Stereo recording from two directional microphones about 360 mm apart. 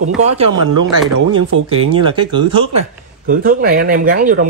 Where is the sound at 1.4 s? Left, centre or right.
Right.